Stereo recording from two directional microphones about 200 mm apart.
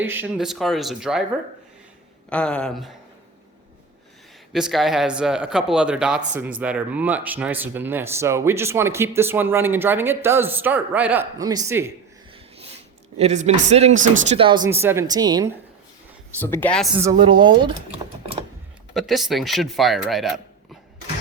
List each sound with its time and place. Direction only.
0.0 s speech: 10° right (ahead or behind)
2.3 s speech: 5° left (ahead or behind)
4.5 s speech: centre (ahead or behind)
13.1 s a woman's voice: 35° right (ahead or behind)
14.7 s a woman's voice: 10° right (ahead or behind)
16.4 s speech: 10° left (ahead or behind)
17.2 s a woman's voice: 25° right (ahead or behind)
18.9 s speech: centre (ahead or behind)